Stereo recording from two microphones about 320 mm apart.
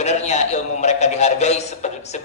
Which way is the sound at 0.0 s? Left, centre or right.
Left.